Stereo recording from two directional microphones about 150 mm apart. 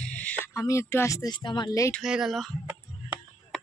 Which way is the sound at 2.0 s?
5° right (ahead or behind).